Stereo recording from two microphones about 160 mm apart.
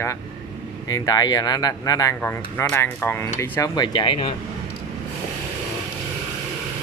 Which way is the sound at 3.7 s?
25° left (ahead or behind).